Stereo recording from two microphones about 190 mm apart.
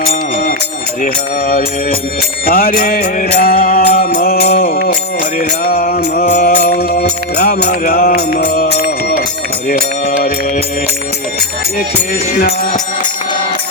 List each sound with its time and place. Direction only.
1.0 s mantra: 45° left (ahead or behind)